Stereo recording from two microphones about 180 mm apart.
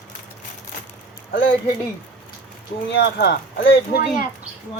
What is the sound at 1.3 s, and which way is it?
Speech, 90° left.